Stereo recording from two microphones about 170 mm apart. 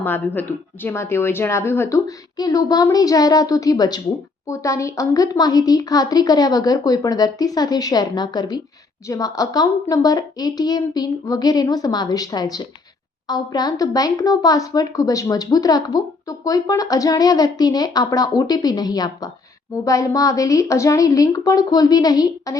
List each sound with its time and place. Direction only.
0.0 s speech: 10° left (ahead or behind)